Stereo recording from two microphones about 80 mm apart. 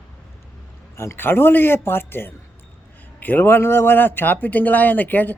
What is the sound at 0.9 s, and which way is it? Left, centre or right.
Speech, left.